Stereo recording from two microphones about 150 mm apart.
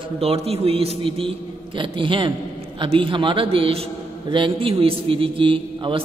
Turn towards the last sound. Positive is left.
turn(degrees=-35)  # may be behind; listen again after turning